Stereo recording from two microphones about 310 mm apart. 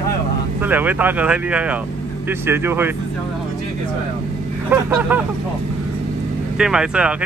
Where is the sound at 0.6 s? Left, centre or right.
Centre.